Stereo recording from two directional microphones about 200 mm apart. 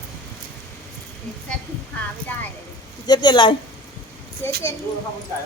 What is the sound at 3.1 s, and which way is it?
Speech, 20° left (ahead or behind).